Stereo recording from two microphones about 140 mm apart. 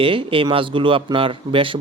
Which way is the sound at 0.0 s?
40° right (ahead or behind).